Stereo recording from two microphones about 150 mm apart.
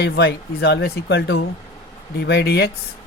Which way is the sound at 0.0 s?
90° left.